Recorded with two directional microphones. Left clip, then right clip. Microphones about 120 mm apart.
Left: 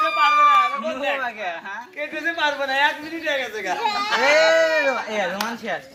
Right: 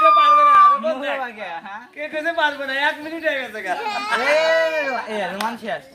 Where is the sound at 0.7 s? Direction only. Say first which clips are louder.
Right 5 dB; 25° right (ahead or behind).